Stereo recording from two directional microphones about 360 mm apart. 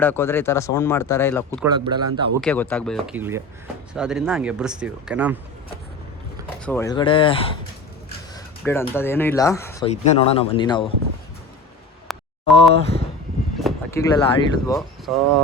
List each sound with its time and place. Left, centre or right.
0.0 s speech: centre
1.5 s speech: centre
2.4 s speech: centre
6.6 s speech: centre
8.6 s speech: centre
9.9 s speech: centre
12.1 s a sound: centre
13.6 s speech: centre